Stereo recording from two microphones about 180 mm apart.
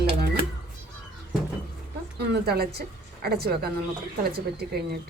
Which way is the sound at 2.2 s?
60° right (ahead or behind).